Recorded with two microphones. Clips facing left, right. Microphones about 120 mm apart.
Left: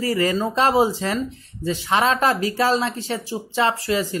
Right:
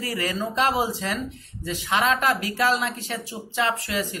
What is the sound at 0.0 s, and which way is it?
Speech, 35° left (ahead or behind).